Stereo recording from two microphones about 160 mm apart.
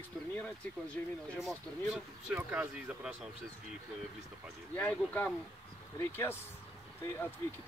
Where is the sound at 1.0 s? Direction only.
10° left (ahead or behind).